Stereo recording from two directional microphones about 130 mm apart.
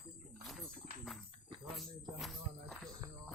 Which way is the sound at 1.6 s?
Centre (ahead or behind).